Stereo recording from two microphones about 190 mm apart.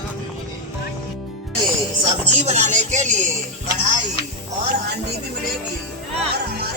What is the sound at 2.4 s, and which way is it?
Speech, 40° right (ahead or behind).